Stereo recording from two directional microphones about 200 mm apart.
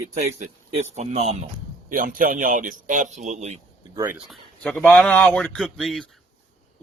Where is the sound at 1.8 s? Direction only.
45° right (ahead or behind).